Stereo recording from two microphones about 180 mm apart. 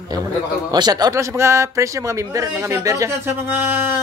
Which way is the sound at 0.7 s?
20° right (ahead or behind).